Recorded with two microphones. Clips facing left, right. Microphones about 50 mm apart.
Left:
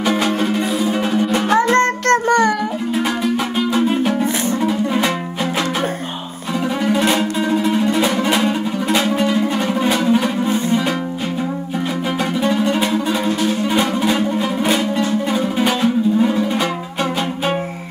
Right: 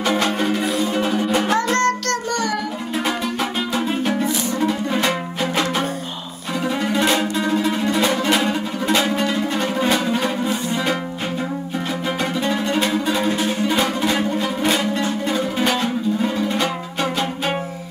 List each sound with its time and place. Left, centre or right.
0.0 s music: centre
1.5 s music: left
3.5 s music: centre
12.4 s music: centre
13.3 s music: centre
13.7 s music: centre